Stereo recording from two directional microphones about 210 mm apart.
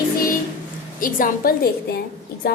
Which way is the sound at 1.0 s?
40° left (ahead or behind).